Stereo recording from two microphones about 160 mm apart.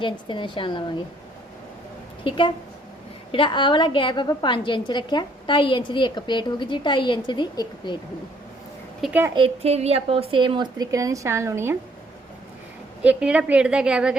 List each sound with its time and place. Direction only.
0.0 s a woman's voice: 30° left (ahead or behind)
2.2 s a woman's voice: 30° left (ahead or behind)
9.0 s a child's voice: 5° right (ahead or behind)
9.3 s a woman's voice: 35° right (ahead or behind); by 11.8 s 15° right (ahead or behind)
13.0 s a woman's voice: 5° right (ahead or behind)